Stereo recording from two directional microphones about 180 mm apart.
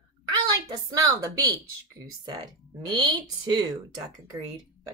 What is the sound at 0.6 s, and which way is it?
Speech, 20° right (ahead or behind).